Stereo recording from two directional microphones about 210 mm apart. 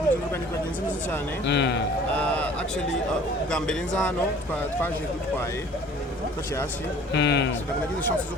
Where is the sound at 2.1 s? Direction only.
5° left (ahead or behind).